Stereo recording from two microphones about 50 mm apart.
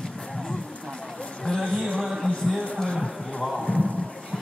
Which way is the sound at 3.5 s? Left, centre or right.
Left.